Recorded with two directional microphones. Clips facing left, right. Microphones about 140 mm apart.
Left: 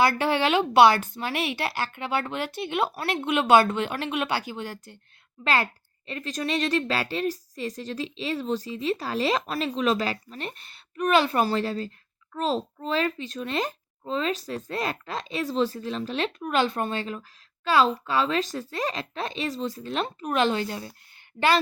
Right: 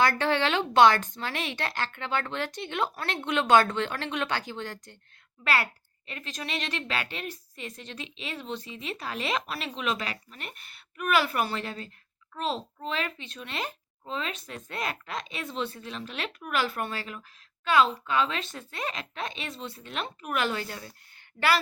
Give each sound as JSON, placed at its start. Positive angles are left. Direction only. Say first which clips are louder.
{"t": 0.0, "sound": "speech", "louder": "left 2 dB", "side_deg": 15}
{"t": 5.4, "sound": "speech", "louder": "left 3 dB", "side_deg": 25}
{"t": 6.1, "sound": "speech", "louder": "left 8 dB", "side_deg": 35}
{"t": 20.4, "sound": "speech", "louder": "left 8 dB", "side_deg": 20}